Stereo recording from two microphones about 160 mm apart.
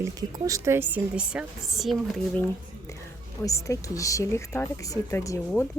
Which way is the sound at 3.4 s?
20° left (ahead or behind).